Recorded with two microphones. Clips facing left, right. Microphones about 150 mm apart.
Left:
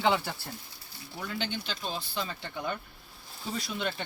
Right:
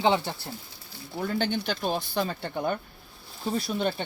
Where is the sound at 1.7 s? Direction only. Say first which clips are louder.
Right 8 dB; 55° right (ahead or behind).